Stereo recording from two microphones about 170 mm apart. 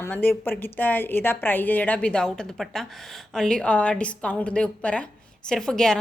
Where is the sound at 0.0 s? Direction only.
10° left (ahead or behind).